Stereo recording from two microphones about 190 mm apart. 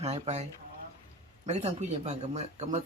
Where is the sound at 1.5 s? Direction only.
35° right (ahead or behind).